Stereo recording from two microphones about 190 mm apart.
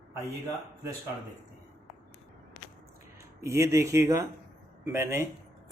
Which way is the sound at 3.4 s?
15° right (ahead or behind).